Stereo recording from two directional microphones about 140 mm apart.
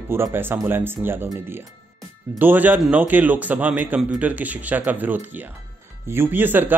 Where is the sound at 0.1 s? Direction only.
15° right (ahead or behind).